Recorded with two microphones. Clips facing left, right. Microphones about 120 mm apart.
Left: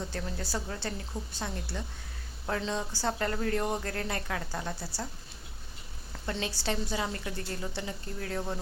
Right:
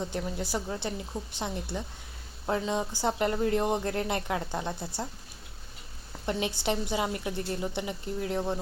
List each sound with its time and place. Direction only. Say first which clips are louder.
0.0 s a woman's voice: right 4 dB; 15° right (ahead or behind)
6.2 s speech: right 4 dB; 20° right (ahead or behind)